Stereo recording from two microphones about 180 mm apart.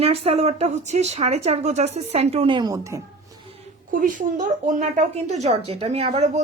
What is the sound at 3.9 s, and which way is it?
A woman's voice, 50° right (ahead or behind).